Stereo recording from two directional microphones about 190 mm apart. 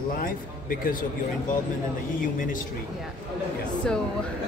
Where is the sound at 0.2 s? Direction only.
50° left (ahead or behind).